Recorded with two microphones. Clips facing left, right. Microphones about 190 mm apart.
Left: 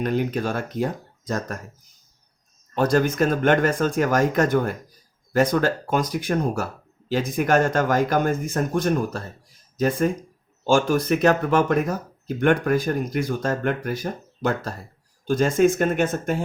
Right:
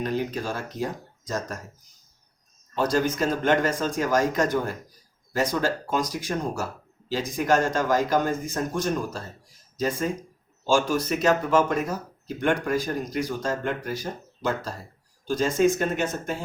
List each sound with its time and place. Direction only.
0.0 s speech: 55° left (ahead or behind)
2.7 s speech: 55° left (ahead or behind)